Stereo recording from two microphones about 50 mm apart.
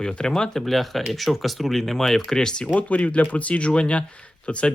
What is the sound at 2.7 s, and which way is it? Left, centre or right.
Speech, left.